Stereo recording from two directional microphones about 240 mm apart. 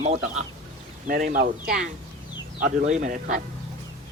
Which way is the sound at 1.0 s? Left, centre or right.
Right.